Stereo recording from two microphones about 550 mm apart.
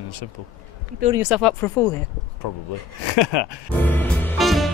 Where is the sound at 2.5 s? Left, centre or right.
Left.